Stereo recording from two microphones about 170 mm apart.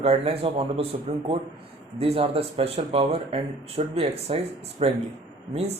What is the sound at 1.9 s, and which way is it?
Speech, 35° right (ahead or behind).